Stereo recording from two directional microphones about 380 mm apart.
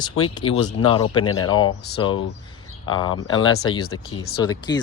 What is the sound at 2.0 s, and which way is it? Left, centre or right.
Speech, centre.